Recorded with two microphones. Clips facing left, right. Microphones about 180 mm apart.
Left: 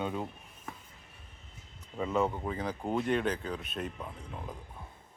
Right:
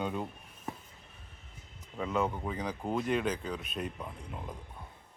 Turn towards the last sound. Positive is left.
turn(degrees=0)  # may be behind; listen again after turning